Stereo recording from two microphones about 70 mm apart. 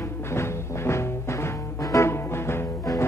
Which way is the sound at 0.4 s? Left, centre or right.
Left.